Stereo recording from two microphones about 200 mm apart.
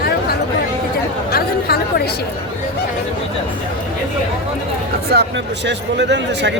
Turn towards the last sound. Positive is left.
turn(degrees=-60)  # may be behind; listen again after turning